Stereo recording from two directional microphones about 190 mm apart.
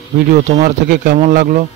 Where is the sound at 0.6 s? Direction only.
45° right (ahead or behind).